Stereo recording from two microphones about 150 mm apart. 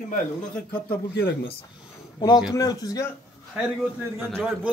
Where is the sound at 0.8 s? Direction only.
90° left.